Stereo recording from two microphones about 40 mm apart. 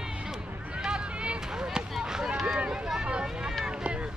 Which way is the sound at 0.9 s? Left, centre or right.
Right.